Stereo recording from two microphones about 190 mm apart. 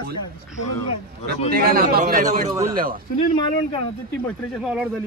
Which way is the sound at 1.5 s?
50° right (ahead or behind).